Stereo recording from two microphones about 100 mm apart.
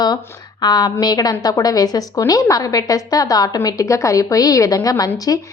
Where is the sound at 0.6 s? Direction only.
45° left (ahead or behind).